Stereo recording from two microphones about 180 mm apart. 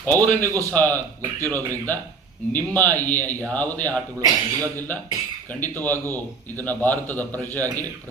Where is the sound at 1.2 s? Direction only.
15° right (ahead or behind).